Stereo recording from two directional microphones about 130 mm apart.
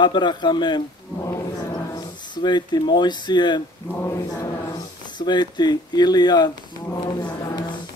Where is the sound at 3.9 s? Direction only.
20° left (ahead or behind).